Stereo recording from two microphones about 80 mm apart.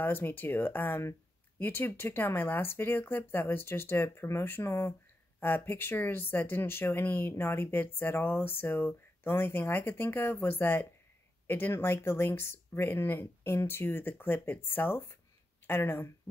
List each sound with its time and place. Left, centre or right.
0.0 s speech: left